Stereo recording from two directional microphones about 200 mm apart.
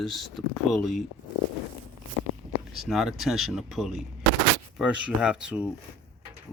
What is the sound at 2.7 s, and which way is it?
Speech, centre (ahead or behind).